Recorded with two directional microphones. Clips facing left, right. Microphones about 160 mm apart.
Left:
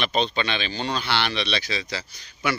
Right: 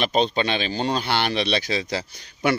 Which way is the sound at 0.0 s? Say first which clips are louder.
Right 3 dB; 40° right (ahead or behind).